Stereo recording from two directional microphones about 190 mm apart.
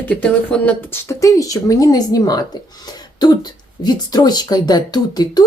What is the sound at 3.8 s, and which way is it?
A woman's voice, 20° left (ahead or behind).